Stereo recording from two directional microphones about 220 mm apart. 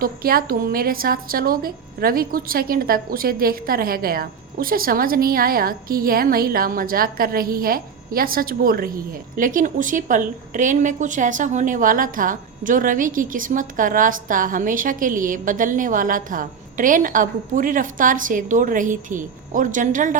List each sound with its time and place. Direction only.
0.0 s a woman's voice: 40° right (ahead or behind)